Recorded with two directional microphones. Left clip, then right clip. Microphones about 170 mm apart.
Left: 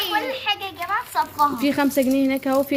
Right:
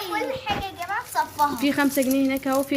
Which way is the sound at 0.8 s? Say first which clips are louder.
Left 3 dB; 20° right (ahead or behind).